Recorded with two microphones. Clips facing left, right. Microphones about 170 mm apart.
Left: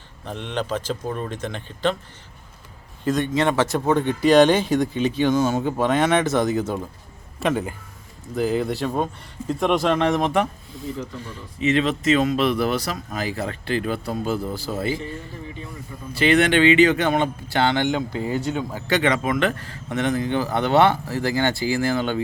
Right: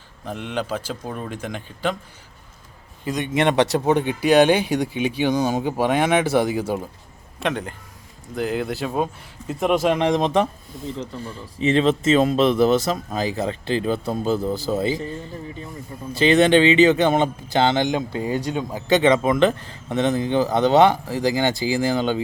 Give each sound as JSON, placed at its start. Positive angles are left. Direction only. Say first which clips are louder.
{"t": 0.3, "sound": "speech", "louder": "even", "side_deg": -5}
{"t": 3.0, "sound": "speech", "louder": "left 1 dB", "side_deg": -15}
{"t": 7.3, "sound": "speech", "louder": "left 2 dB", "side_deg": 5}
{"t": 10.0, "sound": "speech", "louder": "right 1 dB", "side_deg": -20}
{"t": 16.1, "sound": "speech", "louder": "right 3 dB", "side_deg": -25}